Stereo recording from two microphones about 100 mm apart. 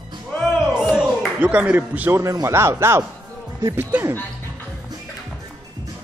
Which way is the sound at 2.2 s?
30° right (ahead or behind).